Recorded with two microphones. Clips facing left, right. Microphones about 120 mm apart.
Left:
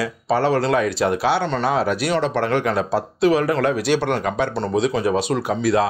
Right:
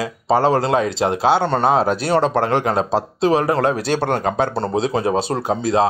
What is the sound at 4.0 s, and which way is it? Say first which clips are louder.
Speech: right 1 dB; 45° right (ahead or behind).